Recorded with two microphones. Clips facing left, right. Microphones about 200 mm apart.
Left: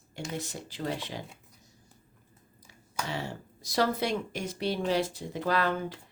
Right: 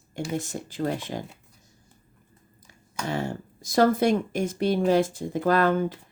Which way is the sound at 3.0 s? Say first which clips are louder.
Right 9 dB; 50° right (ahead or behind).